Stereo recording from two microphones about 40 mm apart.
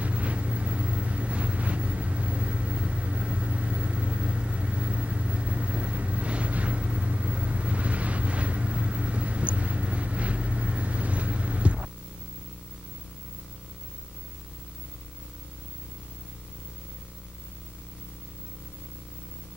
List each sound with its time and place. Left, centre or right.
0.0 s vehicle: right